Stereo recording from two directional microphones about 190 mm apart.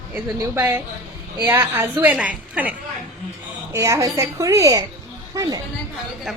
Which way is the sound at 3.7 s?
15° right (ahead or behind).